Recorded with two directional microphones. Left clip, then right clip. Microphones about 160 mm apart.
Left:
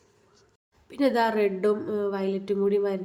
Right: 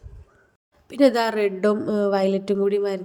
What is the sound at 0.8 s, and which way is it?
A woman's voice, 30° right (ahead or behind).